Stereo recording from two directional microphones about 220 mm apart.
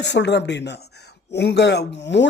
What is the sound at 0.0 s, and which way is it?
Speech, 50° left (ahead or behind).